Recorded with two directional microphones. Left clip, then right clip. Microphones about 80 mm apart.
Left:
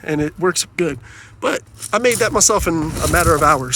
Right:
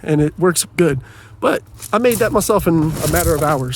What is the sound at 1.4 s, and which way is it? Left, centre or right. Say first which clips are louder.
Speech: right 3 dB; right.